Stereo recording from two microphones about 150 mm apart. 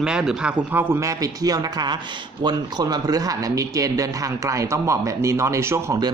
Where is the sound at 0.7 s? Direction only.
15° right (ahead or behind).